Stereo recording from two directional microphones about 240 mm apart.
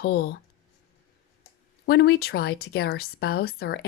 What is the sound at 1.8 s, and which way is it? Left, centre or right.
Speech, left.